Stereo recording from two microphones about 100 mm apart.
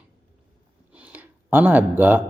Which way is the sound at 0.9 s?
15° right (ahead or behind).